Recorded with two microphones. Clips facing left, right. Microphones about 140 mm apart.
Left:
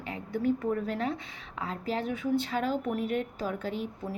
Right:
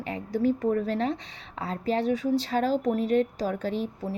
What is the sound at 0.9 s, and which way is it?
A woman's voice, 30° right (ahead or behind).